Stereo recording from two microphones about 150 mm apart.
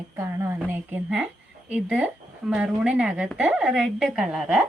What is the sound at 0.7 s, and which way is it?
A woman's voice, 15° right (ahead or behind).